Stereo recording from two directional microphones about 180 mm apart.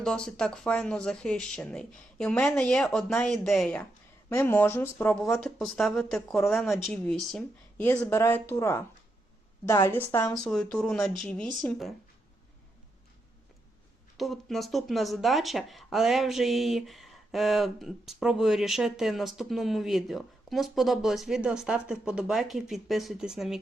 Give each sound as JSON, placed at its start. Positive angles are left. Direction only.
{"t": 0.0, "sound": "speech", "side_deg": 5}
{"t": 10.3, "sound": "speech", "side_deg": 5}
{"t": 14.2, "sound": "speech", "side_deg": 0}